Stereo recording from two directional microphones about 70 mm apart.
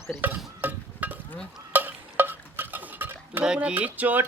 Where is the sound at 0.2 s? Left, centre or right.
Right.